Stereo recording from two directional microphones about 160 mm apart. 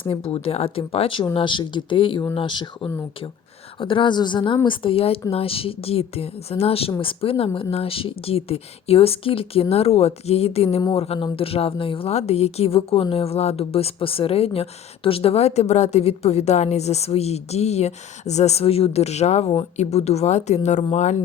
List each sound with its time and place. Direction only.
0.0 s speech: 35° left (ahead or behind)